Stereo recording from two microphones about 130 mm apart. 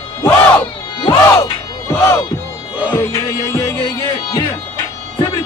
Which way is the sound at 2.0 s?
20° left (ahead or behind).